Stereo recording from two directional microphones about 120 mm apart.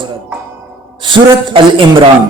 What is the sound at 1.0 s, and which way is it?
Speech, 45° right (ahead or behind).